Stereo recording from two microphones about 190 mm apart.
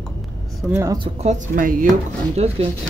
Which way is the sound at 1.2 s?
45° right (ahead or behind).